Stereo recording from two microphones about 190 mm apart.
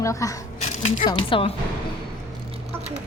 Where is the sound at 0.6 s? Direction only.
35° left (ahead or behind).